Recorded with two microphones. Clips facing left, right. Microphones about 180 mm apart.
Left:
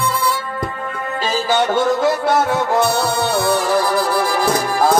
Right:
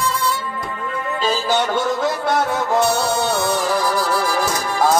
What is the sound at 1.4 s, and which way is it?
A man's voice, centre (ahead or behind).